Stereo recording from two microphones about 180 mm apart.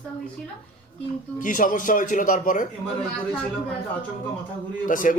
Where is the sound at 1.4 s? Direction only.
50° left (ahead or behind).